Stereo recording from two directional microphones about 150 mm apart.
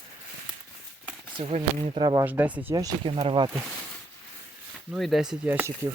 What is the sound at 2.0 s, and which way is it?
Speech, 30° right (ahead or behind).